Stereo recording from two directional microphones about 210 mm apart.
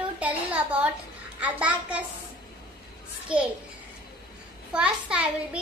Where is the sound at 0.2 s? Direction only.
5° right (ahead or behind).